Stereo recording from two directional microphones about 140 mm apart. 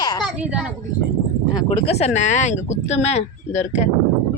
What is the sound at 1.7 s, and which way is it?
Speech, 45° left (ahead or behind).